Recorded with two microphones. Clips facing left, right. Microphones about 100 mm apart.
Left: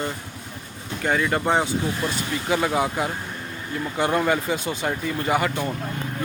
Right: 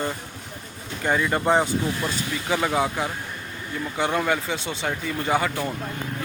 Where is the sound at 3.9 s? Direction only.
10° left (ahead or behind).